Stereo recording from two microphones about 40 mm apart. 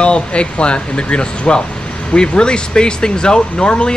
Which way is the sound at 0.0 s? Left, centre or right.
Left.